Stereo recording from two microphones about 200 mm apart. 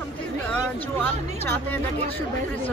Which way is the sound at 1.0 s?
10° left (ahead or behind).